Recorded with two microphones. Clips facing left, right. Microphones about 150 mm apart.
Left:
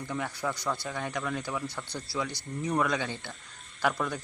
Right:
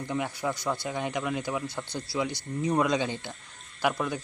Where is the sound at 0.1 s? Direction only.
15° right (ahead or behind).